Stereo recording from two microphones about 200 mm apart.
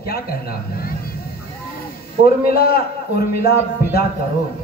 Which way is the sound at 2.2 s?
50° left (ahead or behind).